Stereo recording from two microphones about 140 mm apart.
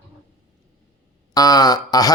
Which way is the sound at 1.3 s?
30° left (ahead or behind).